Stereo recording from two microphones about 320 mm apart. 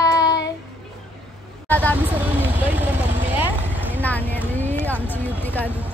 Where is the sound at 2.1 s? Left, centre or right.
Centre.